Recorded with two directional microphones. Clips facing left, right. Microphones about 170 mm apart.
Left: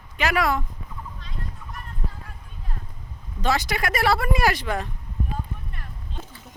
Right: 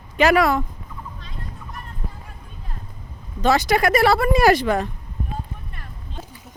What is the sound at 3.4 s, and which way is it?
Speech, 50° right (ahead or behind).